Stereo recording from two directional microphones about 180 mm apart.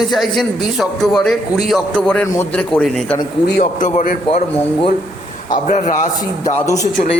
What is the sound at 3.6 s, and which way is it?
Speech, 45° left (ahead or behind).